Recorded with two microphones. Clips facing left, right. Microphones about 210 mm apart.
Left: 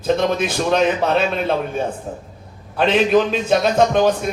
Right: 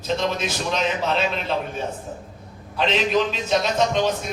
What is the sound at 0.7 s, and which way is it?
Speech, 55° left (ahead or behind).